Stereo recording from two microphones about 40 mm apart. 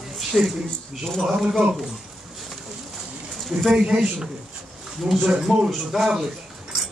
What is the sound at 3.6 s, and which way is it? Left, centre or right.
Speech, centre.